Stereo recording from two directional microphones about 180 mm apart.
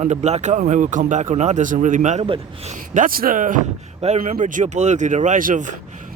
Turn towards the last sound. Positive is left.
turn(degrees=-45)  # may be behind; listen again after turning